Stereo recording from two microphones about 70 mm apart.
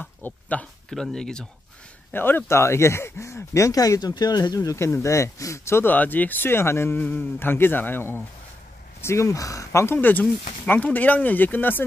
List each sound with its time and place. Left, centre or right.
0.0 s speech: left
1.1 s speech: centre
2.1 s speech: left
2.4 s speech: left
4.7 s speech: left
5.9 s speech: left
7.0 s speech: left
9.0 s speech: left
9.9 s speech: left